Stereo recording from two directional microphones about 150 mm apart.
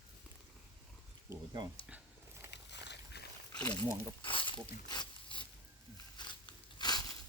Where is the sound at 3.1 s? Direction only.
90° left.